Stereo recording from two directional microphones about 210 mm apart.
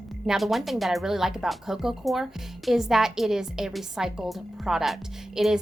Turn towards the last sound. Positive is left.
turn(degrees=0)  # may be behind; listen again after turning